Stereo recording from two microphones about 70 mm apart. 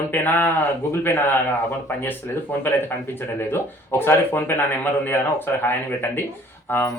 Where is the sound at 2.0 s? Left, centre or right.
Left.